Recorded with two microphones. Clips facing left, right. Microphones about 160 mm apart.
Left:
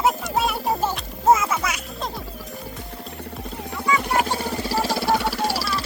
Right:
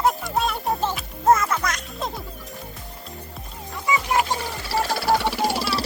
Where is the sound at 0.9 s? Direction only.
5° left (ahead or behind).